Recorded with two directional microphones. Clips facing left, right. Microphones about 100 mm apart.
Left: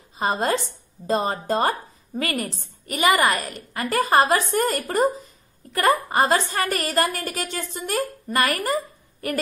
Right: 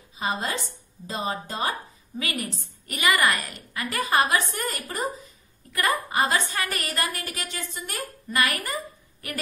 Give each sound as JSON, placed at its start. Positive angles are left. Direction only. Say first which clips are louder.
{"t": 0.2, "sound": "a woman's voice", "louder": "left 6 dB", "side_deg": 50}
{"t": 2.9, "sound": "a woman's voice", "louder": "left 4 dB", "side_deg": 25}
{"t": 3.7, "sound": "a woman's voice", "louder": "left 5 dB", "side_deg": 40}